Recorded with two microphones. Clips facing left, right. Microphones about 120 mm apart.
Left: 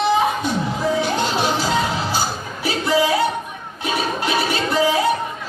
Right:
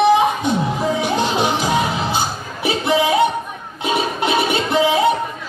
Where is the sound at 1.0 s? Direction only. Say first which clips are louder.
Right 2 dB; 20° right (ahead or behind).